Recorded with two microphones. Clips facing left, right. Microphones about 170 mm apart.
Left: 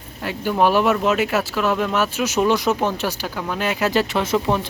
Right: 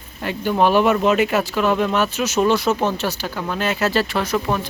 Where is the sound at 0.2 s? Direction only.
5° left (ahead or behind).